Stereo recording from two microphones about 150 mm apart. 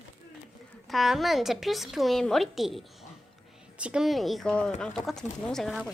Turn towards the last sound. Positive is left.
turn(degrees=0)  # may be behind; listen again after turning